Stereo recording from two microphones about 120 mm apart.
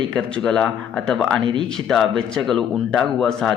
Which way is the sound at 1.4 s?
45° right (ahead or behind).